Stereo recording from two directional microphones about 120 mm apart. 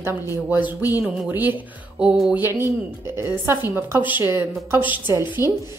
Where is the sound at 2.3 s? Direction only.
20° right (ahead or behind).